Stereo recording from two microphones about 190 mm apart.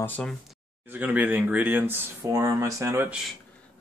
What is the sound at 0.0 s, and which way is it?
Speech, 5° left (ahead or behind).